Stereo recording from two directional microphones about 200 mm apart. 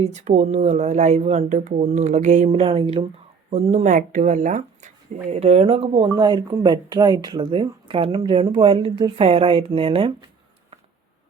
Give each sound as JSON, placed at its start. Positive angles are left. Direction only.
{"t": 0.0, "sound": "speech", "side_deg": -35}